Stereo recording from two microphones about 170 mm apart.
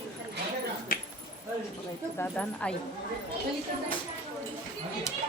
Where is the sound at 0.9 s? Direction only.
60° left (ahead or behind).